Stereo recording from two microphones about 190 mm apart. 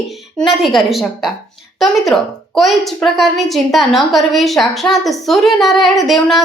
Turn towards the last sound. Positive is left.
turn(degrees=0)  # may be behind; listen again after turning